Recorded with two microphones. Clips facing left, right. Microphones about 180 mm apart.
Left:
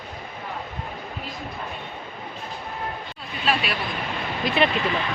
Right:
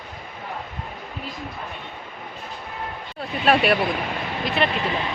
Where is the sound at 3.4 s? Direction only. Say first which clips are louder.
Right 7 dB; 60° right (ahead or behind).